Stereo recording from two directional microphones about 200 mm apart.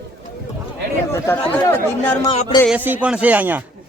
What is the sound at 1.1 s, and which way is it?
Speech, 10° left (ahead or behind).